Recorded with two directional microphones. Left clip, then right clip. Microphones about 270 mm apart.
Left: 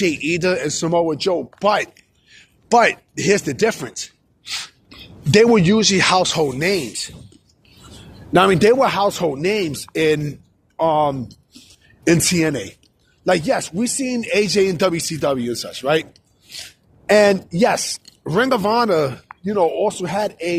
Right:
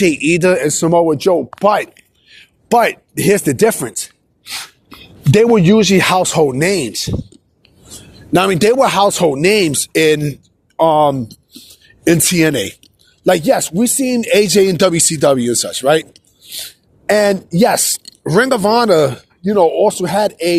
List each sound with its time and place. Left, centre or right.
0.0 s speech: right
8.3 s speech: right